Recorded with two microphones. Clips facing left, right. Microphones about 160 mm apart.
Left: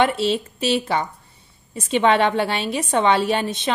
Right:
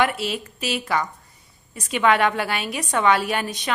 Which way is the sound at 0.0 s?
25° left (ahead or behind).